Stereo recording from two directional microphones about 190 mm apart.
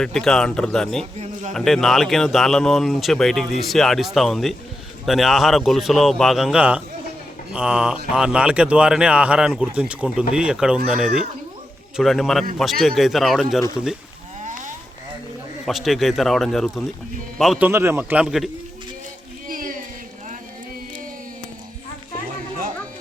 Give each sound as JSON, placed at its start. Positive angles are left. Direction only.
{"t": 0.0, "sound": "speech", "side_deg": 5}
{"t": 1.2, "sound": "a man's voice", "side_deg": -40}
{"t": 1.5, "sound": "speech", "side_deg": 0}
{"t": 14.4, "sound": "a sound", "side_deg": -40}
{"t": 15.6, "sound": "speech", "side_deg": 0}
{"t": 17.7, "sound": "speech", "side_deg": -10}
{"t": 19.5, "sound": "a sound", "side_deg": -45}